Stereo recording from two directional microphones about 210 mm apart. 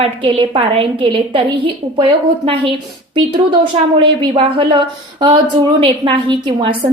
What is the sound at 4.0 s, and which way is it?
A woman's voice, 25° right (ahead or behind).